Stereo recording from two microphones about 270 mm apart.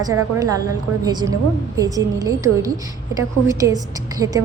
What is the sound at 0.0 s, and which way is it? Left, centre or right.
A woman's voice, centre.